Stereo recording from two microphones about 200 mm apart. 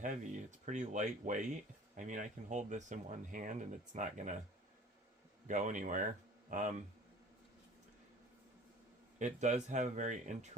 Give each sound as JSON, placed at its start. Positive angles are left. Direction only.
{"t": 0.0, "sound": "speech", "side_deg": -40}
{"t": 5.5, "sound": "speech", "side_deg": -40}
{"t": 9.1, "sound": "speech", "side_deg": -35}